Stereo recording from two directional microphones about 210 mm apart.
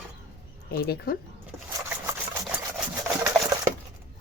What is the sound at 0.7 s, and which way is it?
Speech, 45° left (ahead or behind).